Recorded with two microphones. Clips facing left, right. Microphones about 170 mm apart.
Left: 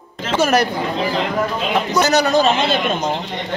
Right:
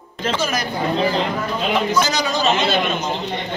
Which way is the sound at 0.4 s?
70° left (ahead or behind).